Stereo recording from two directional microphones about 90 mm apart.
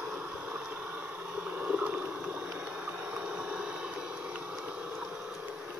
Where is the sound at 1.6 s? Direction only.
15° right (ahead or behind).